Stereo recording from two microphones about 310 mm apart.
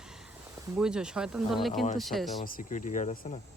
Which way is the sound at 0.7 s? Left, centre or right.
Centre.